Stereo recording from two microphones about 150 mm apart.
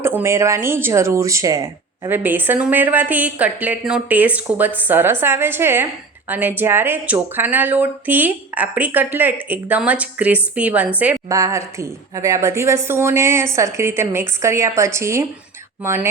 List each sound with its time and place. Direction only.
0.0 s speech: 15° right (ahead or behind)
11.3 s a woman's voice: 20° right (ahead or behind)